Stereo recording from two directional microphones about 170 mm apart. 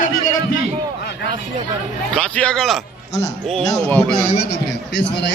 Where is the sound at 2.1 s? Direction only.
5° left (ahead or behind).